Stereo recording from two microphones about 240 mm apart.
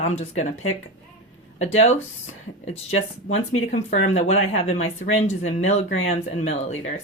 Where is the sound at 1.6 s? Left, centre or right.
Left.